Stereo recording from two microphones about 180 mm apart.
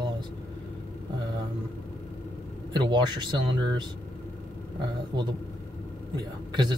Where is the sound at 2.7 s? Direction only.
25° right (ahead or behind).